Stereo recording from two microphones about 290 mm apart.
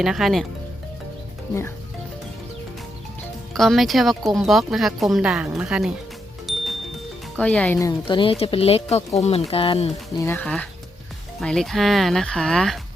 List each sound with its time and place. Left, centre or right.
0.0 s speech: centre
3.5 s speech: centre
6.5 s music: centre
7.3 s speech: centre
10.2 s speech: centre